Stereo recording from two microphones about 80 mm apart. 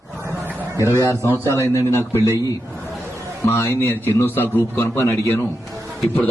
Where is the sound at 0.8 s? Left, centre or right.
Left.